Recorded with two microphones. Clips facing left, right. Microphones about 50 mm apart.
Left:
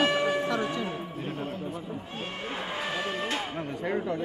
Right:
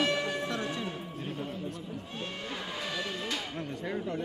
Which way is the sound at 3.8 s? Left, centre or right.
Left.